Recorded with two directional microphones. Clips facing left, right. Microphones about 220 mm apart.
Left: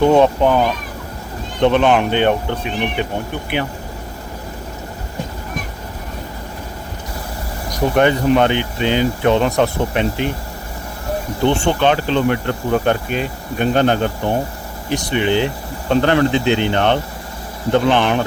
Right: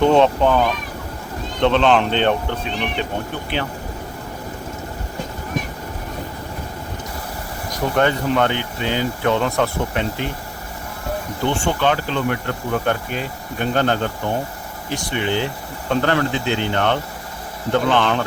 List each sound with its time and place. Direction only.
0.0 s speech: 10° left (ahead or behind)
1.6 s speech: 15° left (ahead or behind)
7.9 s speech: 15° left (ahead or behind)
11.4 s speech: 20° left (ahead or behind)